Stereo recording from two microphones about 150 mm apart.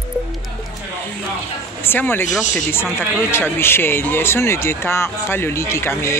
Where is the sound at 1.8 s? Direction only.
15° left (ahead or behind).